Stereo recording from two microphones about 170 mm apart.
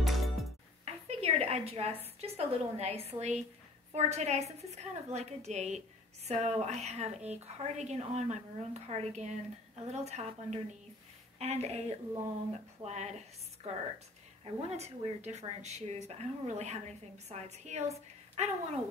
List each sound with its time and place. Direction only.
0.0 s music: centre (ahead or behind)
0.8 s a woman's voice: 35° right (ahead or behind)
12.8 s a woman's voice: 40° right (ahead or behind)